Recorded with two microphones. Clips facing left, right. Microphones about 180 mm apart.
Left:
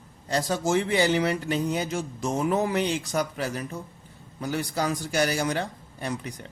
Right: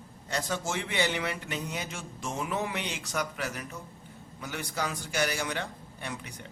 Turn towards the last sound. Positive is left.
turn(degrees=35)  # may be behind; listen again after turning